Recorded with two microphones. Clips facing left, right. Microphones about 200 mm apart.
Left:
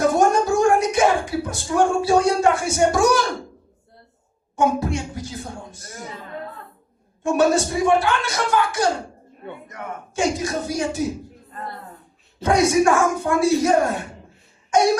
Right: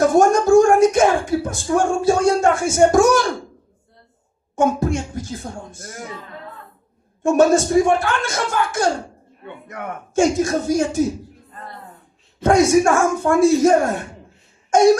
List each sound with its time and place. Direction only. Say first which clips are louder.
0.2 s a sound: right 5 dB; 45° right (ahead or behind)
4.5 s speech: right 2 dB; 45° right (ahead or behind)
7.2 s speech: right 4 dB; 45° right (ahead or behind)
10.2 s speech: right 6 dB; 45° right (ahead or behind)
12.4 s speech: right 3 dB; 45° right (ahead or behind)